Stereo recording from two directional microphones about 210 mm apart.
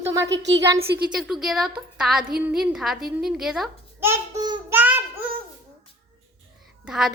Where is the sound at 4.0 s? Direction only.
15° right (ahead or behind).